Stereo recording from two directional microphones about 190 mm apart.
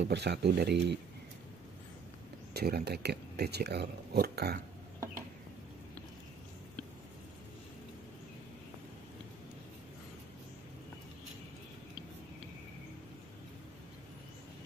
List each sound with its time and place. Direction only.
0.0 s speech: 65° right (ahead or behind)
2.5 s speech: 55° right (ahead or behind)